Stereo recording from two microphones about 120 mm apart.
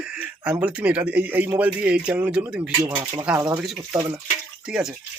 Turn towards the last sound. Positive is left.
turn(degrees=-5)  # may be behind; listen again after turning